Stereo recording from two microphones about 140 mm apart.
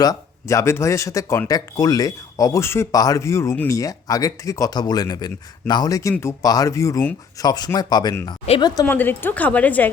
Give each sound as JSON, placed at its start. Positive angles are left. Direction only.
{"t": 0.0, "sound": "speech", "side_deg": 25}
{"t": 8.9, "sound": "a woman's voice", "side_deg": 15}